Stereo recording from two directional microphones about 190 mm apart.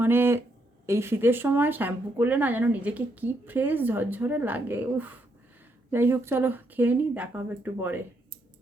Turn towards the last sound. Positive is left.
turn(degrees=-10)  # may be behind; listen again after turning